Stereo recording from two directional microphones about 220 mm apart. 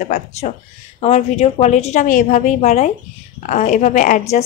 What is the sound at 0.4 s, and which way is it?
A woman's voice, 35° left (ahead or behind).